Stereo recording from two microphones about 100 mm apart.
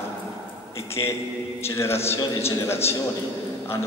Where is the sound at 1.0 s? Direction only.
40° left (ahead or behind).